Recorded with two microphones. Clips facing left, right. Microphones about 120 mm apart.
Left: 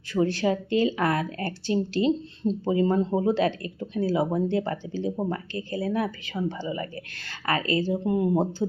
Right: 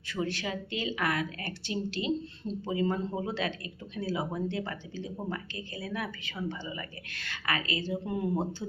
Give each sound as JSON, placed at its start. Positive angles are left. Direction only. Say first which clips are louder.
{"t": 0.1, "sound": "speech", "louder": "left 10 dB", "side_deg": 35}